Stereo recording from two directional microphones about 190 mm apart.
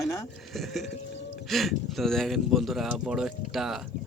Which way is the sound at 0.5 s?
Centre (ahead or behind).